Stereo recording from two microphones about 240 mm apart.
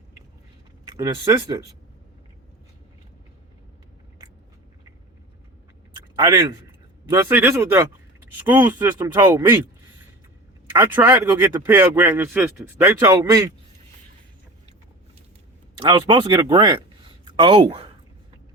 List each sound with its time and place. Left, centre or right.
0.9 s speech: centre
6.1 s a man's voice: centre
10.7 s speech: centre
15.8 s speech: centre